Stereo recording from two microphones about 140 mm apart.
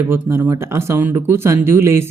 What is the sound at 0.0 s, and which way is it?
Speech, 20° right (ahead or behind).